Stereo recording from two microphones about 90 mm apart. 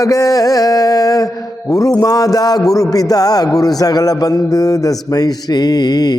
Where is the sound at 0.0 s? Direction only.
40° left (ahead or behind).